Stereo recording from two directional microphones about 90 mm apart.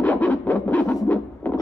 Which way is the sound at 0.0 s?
15° left (ahead or behind).